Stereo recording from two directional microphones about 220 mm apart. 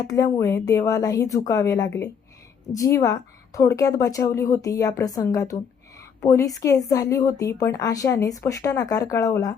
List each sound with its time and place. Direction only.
0.0 s a woman's voice: 15° left (ahead or behind)